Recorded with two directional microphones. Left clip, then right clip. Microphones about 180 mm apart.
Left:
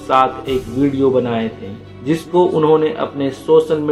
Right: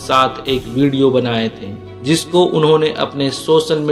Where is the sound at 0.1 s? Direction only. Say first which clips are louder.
Even; 40° right (ahead or behind).